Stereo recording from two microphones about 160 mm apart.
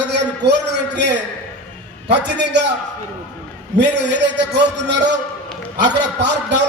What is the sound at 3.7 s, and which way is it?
Speech, 90° right.